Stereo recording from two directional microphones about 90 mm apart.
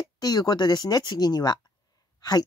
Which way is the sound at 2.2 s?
50° left (ahead or behind).